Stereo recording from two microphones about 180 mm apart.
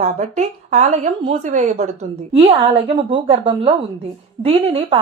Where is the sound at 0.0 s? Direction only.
35° right (ahead or behind).